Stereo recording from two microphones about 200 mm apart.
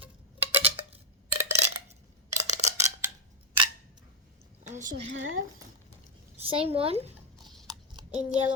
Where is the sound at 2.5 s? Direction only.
35° right (ahead or behind).